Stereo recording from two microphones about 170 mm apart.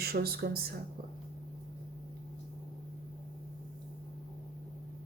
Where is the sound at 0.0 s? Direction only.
65° right (ahead or behind).